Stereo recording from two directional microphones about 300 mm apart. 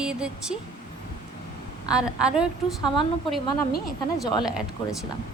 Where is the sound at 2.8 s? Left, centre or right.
Centre.